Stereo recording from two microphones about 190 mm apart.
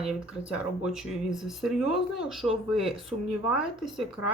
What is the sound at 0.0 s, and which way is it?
Speech, 5° right (ahead or behind).